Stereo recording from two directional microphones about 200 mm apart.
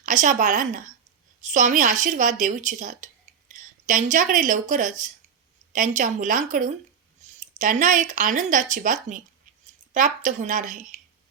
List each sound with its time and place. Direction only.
0.0 s speech: 40° right (ahead or behind)